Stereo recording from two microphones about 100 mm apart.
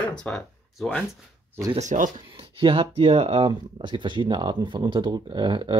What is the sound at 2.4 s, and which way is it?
Speech, 60° right (ahead or behind).